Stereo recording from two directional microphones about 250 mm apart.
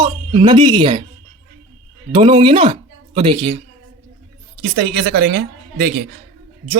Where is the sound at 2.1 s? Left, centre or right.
Right.